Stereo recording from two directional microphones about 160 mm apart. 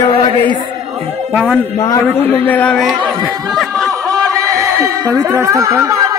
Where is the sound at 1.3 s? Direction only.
5° right (ahead or behind).